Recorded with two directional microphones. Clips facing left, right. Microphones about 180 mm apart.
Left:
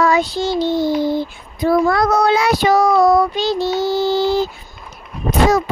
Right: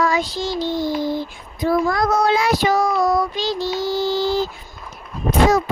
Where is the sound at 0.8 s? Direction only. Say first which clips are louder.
Left 4 dB; 65° left (ahead or behind).